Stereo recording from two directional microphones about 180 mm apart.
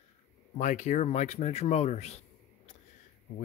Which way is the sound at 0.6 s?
40° left (ahead or behind).